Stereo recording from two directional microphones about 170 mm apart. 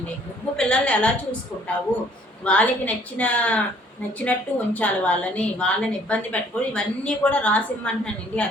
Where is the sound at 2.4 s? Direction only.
5° left (ahead or behind).